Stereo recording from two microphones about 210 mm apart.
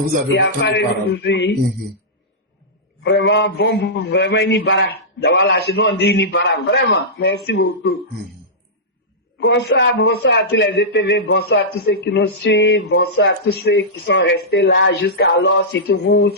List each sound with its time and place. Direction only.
0.3 s a man's voice: 55° left (ahead or behind)
3.0 s a man's voice: 55° left (ahead or behind)
9.4 s a man's voice: 60° left (ahead or behind)